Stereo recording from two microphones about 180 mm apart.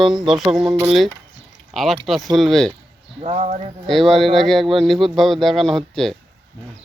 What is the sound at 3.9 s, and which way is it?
A man's voice, centre (ahead or behind).